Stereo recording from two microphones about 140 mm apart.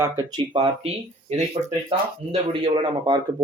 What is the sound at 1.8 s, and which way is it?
Speech, 40° right (ahead or behind).